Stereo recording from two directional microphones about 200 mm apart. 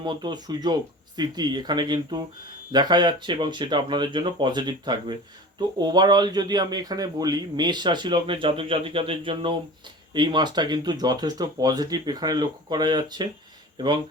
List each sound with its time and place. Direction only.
0.0 s speech: 20° right (ahead or behind)